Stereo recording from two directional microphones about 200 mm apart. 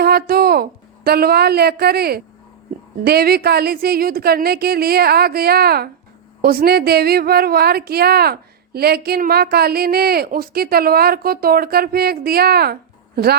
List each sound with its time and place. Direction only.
0.0 s a woman's voice: 50° right (ahead or behind)